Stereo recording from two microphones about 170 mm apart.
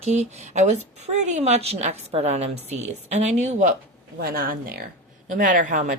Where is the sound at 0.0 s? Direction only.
40° right (ahead or behind).